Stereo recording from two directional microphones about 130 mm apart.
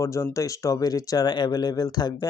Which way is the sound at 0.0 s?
25° left (ahead or behind).